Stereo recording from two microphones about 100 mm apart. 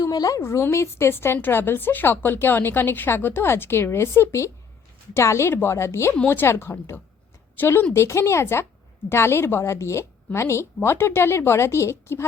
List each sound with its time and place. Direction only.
0.0 s a woman's voice: 35° left (ahead or behind)